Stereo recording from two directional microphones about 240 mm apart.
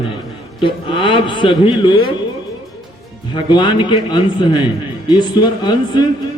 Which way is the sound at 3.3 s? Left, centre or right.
Centre.